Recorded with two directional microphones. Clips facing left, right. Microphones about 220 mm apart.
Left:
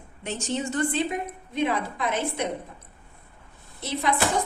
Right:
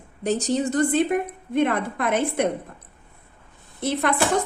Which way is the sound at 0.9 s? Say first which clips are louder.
Right 6 dB; 55° right (ahead or behind).